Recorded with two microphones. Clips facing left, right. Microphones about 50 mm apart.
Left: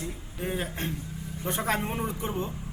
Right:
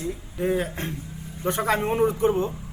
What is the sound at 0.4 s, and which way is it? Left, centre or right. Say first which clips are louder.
Speech: right 6 dB; right.